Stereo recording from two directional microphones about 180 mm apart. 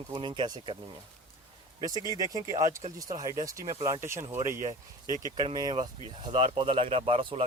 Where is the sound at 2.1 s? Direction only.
20° right (ahead or behind).